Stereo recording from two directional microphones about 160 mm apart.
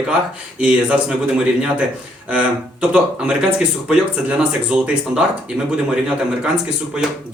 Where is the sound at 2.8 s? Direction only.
5° right (ahead or behind).